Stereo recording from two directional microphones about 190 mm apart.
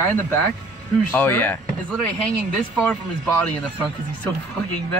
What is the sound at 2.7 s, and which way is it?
Speech, 5° left (ahead or behind).